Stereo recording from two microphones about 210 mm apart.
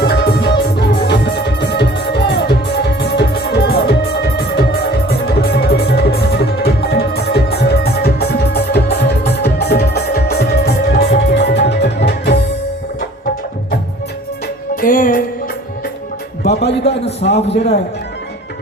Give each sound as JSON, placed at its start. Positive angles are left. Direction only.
{"t": 0.0, "sound": "music", "side_deg": 50}
{"t": 14.8, "sound": "music", "side_deg": 40}
{"t": 17.2, "sound": "a man's voice", "side_deg": 30}